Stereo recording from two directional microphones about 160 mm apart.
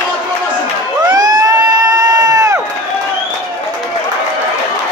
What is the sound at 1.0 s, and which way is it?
Crowd, 25° right (ahead or behind).